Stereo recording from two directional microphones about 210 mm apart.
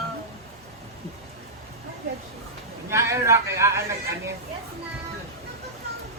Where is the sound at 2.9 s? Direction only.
15° right (ahead or behind).